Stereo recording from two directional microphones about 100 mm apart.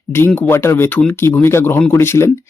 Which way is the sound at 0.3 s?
20° left (ahead or behind).